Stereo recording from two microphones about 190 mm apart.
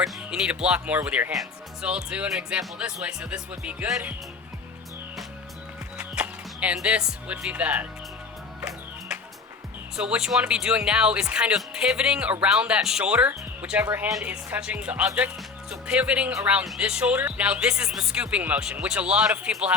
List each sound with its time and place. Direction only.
0.0 s speech: 5° right (ahead or behind)
6.0 s speech: 5° right (ahead or behind)
10.0 s speech: 5° right (ahead or behind)